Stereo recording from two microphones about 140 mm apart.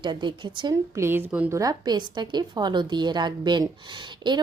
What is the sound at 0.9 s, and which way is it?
Speech, 15° right (ahead or behind).